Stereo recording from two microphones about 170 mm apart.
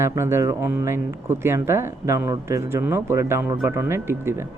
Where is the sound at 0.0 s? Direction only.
15° right (ahead or behind).